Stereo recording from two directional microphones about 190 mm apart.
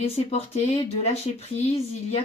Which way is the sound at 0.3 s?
35° left (ahead or behind).